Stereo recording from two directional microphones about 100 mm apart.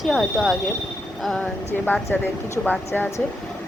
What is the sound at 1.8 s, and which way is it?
Speech, 15° left (ahead or behind).